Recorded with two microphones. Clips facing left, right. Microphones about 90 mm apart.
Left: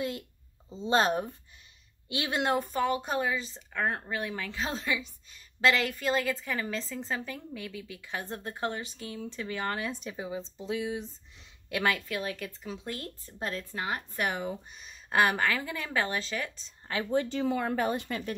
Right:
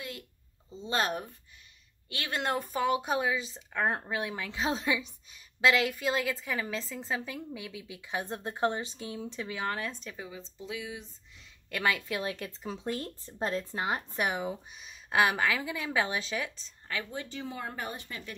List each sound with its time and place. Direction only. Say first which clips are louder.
0.7 s speech: left 5 dB; 30° left (ahead or behind)
2.0 s speech: left 4 dB; 20° left (ahead or behind)
2.4 s speech: left 1 dB; centre (ahead or behind); by 9.5 s 15° right (ahead or behind)
9.5 s speech: left 2 dB; centre (ahead or behind)
10.0 s speech: left 6 dB; 25° left (ahead or behind)
11.7 s speech: left 1 dB; centre (ahead or behind)
12.0 s a woman's voice: even; 20° right (ahead or behind)
17.3 s a woman's voice: left 9 dB; 85° left